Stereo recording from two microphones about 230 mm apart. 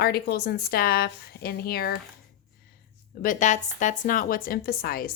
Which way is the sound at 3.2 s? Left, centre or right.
Left.